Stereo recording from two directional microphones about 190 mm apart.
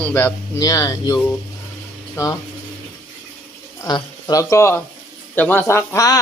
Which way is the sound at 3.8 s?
15° left (ahead or behind).